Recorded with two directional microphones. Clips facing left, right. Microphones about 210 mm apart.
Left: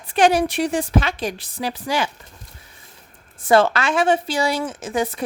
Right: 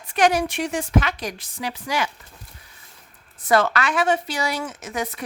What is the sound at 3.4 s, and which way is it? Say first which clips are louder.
Speech: left 4 dB; 30° left (ahead or behind).